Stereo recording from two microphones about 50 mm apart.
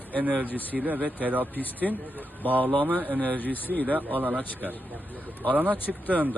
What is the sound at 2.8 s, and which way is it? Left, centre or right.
Speech, right.